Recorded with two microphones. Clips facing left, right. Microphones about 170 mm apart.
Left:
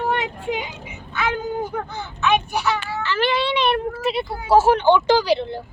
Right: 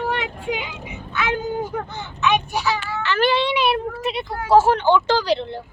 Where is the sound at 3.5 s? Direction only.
10° right (ahead or behind).